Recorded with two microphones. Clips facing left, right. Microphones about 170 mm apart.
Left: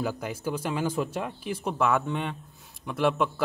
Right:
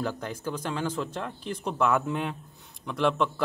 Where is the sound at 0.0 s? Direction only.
10° left (ahead or behind).